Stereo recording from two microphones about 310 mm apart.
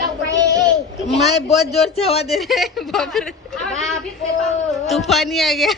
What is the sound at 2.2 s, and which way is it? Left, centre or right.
A woman's voice, centre.